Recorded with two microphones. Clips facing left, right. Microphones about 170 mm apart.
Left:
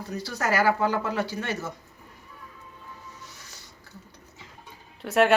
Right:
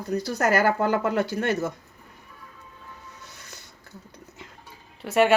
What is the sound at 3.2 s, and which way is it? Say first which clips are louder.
Music: right 1 dB; 60° right (ahead or behind).